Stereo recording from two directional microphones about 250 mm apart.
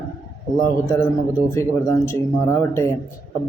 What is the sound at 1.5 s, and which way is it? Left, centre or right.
Speech, centre.